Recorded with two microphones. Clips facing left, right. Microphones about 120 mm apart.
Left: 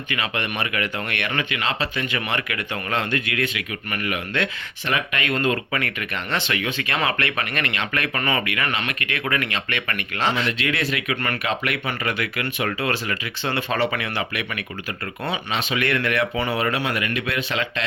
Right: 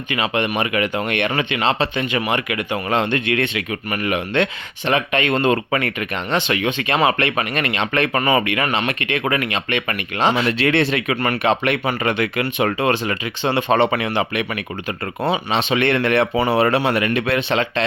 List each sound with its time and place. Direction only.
0.1 s speech: 20° right (ahead or behind)
1.3 s speech: 30° right (ahead or behind)
10.6 s speech: 30° right (ahead or behind)